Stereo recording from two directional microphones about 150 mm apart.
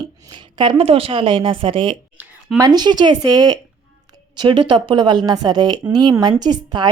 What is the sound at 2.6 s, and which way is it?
A woman's voice, 30° right (ahead or behind).